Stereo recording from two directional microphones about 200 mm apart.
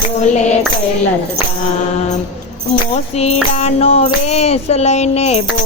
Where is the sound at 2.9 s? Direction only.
30° left (ahead or behind).